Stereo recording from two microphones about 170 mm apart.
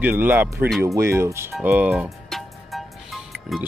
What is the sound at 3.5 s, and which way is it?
Speech, centre (ahead or behind).